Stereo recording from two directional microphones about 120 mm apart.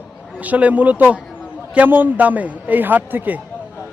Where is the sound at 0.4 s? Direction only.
15° right (ahead or behind).